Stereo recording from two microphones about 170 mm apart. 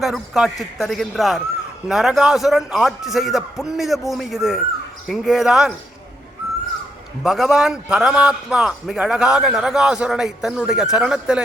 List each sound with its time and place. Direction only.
0.0 s a man's voice: centre (ahead or behind)
7.2 s a man's voice: centre (ahead or behind)